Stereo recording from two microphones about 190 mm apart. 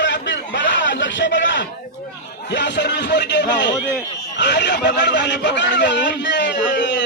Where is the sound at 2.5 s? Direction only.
65° left (ahead or behind).